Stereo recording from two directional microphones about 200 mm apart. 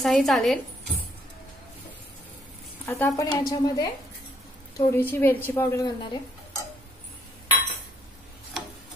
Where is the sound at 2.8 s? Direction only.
15° left (ahead or behind).